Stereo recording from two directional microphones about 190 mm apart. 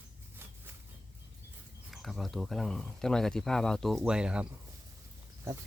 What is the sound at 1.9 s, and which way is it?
Speech, centre (ahead or behind).